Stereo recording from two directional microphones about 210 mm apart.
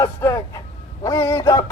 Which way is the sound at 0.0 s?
15° left (ahead or behind).